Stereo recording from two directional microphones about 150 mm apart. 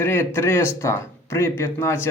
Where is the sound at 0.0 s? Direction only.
15° left (ahead or behind).